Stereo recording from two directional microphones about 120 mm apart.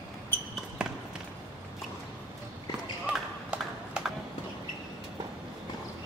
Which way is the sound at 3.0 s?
10° right (ahead or behind).